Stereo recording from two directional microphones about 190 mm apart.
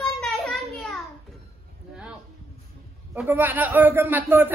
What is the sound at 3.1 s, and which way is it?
A man's voice, 10° right (ahead or behind).